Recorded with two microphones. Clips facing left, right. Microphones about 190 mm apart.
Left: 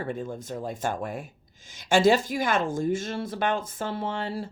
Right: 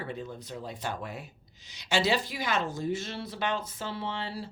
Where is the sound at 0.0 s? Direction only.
50° left (ahead or behind).